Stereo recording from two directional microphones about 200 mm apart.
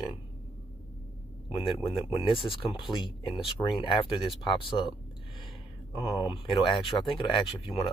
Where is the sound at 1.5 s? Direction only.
25° left (ahead or behind).